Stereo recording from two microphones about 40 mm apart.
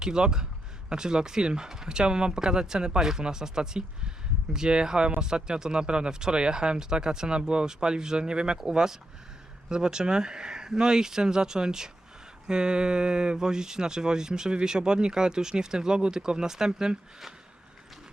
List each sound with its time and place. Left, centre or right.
0.0 s speech: centre